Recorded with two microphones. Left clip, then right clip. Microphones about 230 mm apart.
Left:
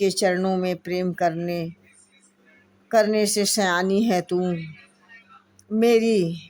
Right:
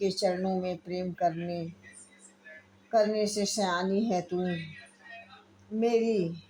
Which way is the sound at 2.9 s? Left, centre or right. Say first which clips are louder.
Left 7 dB; centre.